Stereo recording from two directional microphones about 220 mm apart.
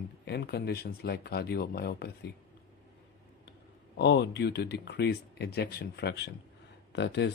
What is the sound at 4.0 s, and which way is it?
Speech, 50° left (ahead or behind).